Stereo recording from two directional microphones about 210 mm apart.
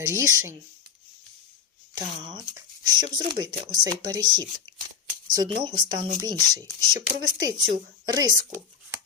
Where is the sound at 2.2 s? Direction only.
20° right (ahead or behind).